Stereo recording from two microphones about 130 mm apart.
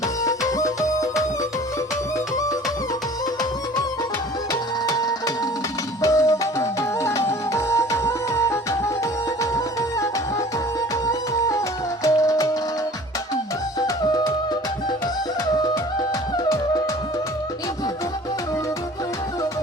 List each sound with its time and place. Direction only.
0.3 s music: 25° left (ahead or behind)
4.9 s music: 30° left (ahead or behind)